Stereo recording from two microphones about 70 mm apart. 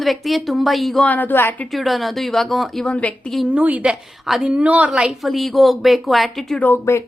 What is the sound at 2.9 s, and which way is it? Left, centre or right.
Speech, centre.